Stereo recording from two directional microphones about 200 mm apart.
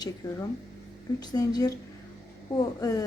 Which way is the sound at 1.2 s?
20° left (ahead or behind).